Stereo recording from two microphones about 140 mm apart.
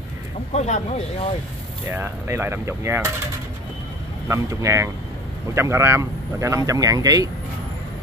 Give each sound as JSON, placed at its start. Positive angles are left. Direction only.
{"t": 0.5, "sound": "speech", "side_deg": 55}
{"t": 1.9, "sound": "cutlery", "side_deg": -15}
{"t": 4.3, "sound": "speech", "side_deg": -25}